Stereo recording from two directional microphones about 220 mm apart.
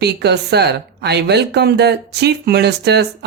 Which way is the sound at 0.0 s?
50° right (ahead or behind).